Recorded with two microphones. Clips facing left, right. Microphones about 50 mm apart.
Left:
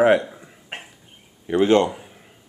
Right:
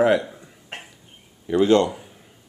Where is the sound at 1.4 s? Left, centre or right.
Left.